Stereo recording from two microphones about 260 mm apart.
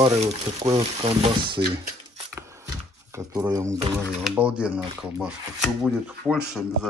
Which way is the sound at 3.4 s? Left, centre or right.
Centre.